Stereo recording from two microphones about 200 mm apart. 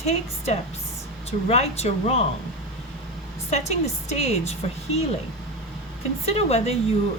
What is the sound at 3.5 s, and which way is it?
A woman's voice, 35° left (ahead or behind).